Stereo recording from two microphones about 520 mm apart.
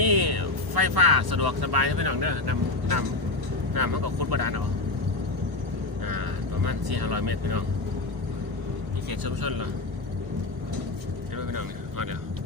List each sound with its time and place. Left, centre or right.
0.0 s speech: right
6.1 s speech: right
9.0 s speech: right
11.3 s vehicle: right